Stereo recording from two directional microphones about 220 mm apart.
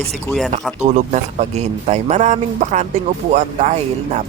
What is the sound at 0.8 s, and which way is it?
A man's voice, 30° right (ahead or behind).